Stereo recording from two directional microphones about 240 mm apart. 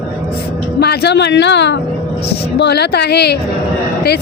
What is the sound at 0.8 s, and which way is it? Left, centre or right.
Female singing, left.